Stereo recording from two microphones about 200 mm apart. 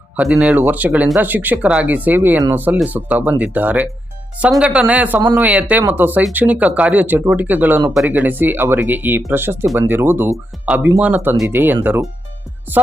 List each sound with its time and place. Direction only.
0.2 s speech: 5° right (ahead or behind)